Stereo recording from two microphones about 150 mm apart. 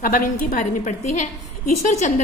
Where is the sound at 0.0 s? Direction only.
65° left (ahead or behind).